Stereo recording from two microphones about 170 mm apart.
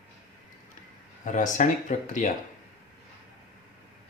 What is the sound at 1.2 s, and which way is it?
Speech, 45° left (ahead or behind).